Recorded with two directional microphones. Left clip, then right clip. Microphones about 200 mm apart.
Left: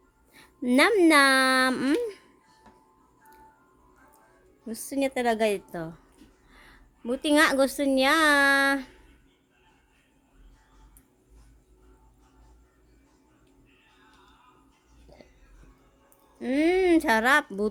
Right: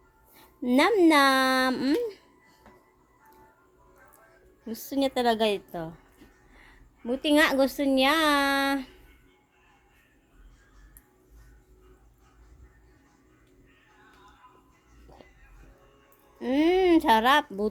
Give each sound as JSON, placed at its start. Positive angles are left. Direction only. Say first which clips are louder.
{"t": 0.3, "sound": "speech", "louder": "left 2 dB", "side_deg": 15}
{"t": 4.6, "sound": "a woman's voice", "louder": "even", "side_deg": 5}
{"t": 16.4, "sound": "a woman's voice", "louder": "right 1 dB", "side_deg": 15}